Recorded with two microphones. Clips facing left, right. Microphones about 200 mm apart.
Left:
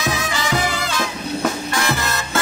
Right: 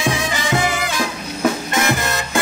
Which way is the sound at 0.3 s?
20° right (ahead or behind).